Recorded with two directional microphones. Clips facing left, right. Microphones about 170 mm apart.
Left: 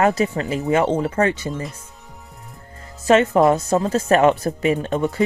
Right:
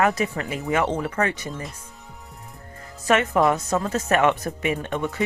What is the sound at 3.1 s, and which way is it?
Speech, 30° left (ahead or behind).